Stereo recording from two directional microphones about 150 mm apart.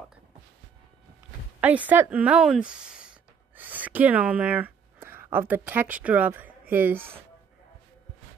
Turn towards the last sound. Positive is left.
turn(degrees=-15)  # may be behind; listen again after turning